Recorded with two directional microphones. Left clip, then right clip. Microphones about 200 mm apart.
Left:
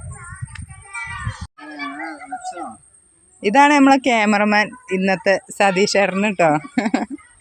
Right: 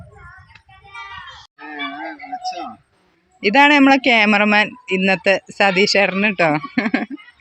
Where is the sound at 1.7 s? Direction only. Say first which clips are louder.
Right 1 dB; centre (ahead or behind).